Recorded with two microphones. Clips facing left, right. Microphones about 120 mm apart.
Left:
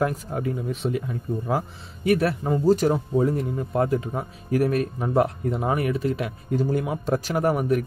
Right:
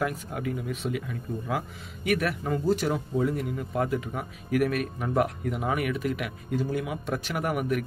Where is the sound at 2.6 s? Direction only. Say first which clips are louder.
Left 7 dB; 40° left (ahead or behind).